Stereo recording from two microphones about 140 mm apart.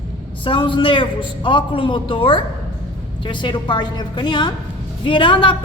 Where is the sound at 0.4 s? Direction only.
35° left (ahead or behind).